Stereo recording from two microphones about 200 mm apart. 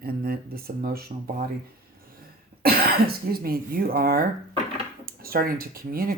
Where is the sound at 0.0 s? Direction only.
50° right (ahead or behind).